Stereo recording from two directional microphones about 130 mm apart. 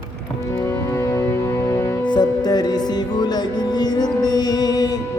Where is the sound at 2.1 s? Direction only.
30° left (ahead or behind).